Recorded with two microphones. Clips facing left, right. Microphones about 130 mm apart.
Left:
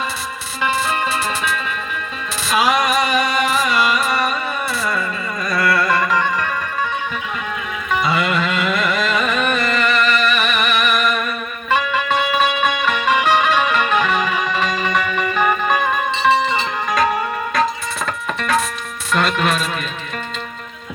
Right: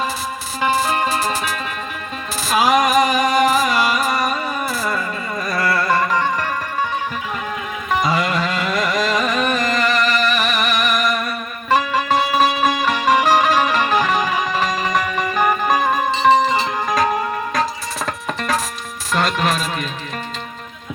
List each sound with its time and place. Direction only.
0.6 s music: 40° right (ahead or behind)
5.5 s music: 25° right (ahead or behind)
7.9 s music: 35° right (ahead or behind)
18.0 s music: 40° right (ahead or behind)